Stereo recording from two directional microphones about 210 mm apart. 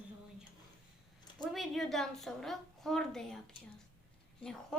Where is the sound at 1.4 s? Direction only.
Centre (ahead or behind).